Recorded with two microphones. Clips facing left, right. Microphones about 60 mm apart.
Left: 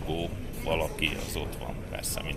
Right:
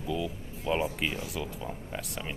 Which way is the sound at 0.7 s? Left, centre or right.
Centre.